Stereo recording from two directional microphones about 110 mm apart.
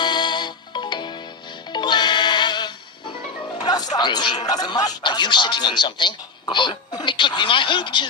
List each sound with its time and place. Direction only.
0.0 s music: 45° left (ahead or behind)
3.9 s speech: 40° left (ahead or behind)